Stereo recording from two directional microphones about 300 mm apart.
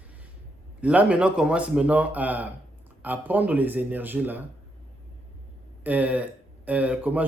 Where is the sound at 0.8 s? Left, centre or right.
Centre.